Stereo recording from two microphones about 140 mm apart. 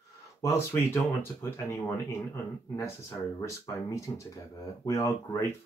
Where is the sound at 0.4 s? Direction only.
20° left (ahead or behind).